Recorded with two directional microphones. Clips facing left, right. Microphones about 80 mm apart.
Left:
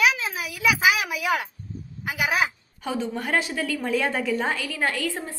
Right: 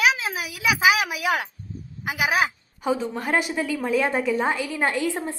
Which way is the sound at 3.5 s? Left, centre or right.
Centre.